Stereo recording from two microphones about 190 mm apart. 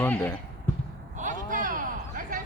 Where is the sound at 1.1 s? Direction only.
45° right (ahead or behind).